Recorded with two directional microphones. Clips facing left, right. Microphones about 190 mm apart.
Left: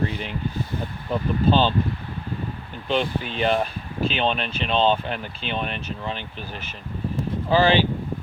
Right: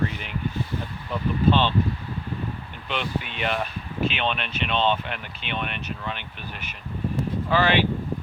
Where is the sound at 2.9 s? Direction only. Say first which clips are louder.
Left 5 dB; 35° left (ahead or behind).